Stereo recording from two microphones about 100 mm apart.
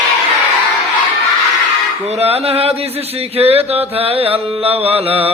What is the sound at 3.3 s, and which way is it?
Music, 85° right.